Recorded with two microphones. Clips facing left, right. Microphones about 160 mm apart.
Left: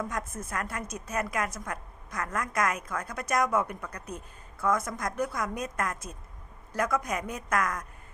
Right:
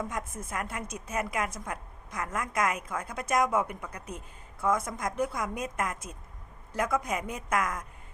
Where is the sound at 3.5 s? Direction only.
10° right (ahead or behind).